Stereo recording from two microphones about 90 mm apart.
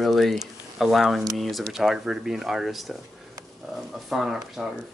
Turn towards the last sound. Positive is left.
turn(degrees=-5)  # may be behind; listen again after turning